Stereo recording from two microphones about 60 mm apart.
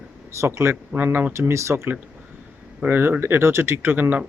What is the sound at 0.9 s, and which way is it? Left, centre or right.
Speech, right.